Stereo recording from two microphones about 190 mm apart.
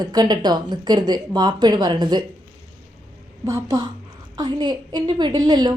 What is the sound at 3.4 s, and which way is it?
A woman's voice, 15° right (ahead or behind).